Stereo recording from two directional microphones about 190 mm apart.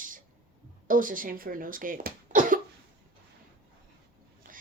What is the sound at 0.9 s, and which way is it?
Speech, 45° right (ahead or behind).